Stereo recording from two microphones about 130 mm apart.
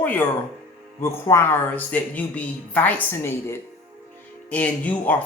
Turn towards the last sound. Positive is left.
turn(degrees=10)  # may be behind; listen again after turning